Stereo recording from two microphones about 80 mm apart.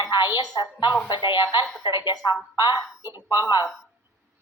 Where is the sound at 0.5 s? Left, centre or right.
Left.